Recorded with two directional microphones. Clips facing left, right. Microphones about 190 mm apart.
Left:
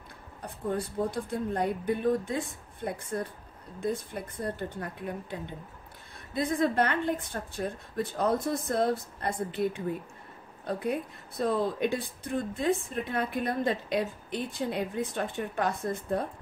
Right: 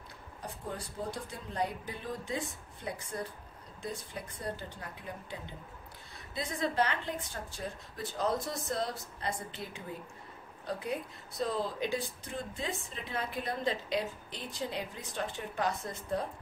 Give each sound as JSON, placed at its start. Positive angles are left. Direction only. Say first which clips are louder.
{"t": 1.0, "sound": "a woman's voice", "louder": "left 9 dB", "side_deg": 55}